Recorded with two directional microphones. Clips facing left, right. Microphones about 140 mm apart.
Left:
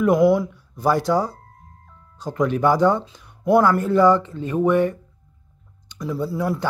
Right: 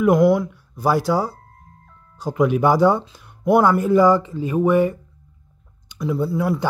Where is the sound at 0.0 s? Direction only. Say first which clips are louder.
Right 1 dB; centre (ahead or behind).